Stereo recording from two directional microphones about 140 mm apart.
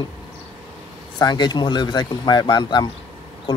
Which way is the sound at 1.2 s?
30° left (ahead or behind).